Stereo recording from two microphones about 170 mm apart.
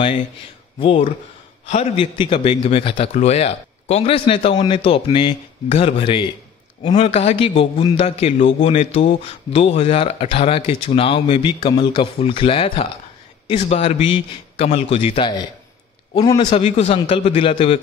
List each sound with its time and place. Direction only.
0.7 s a man's voice: 30° left (ahead or behind)
1.7 s speech: 40° left (ahead or behind)
2.1 s a man's voice: 30° left (ahead or behind)
16.5 s speech: 40° left (ahead or behind)